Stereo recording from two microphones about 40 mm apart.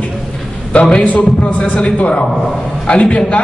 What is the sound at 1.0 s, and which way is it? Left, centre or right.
Speech, left.